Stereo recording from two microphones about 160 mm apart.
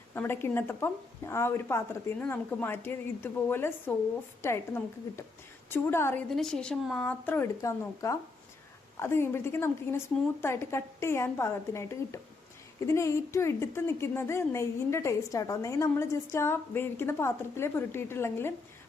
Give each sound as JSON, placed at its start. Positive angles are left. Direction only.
{"t": 0.1, "sound": "a woman's voice", "side_deg": 15}
{"t": 6.3, "sound": "a woman's voice", "side_deg": 5}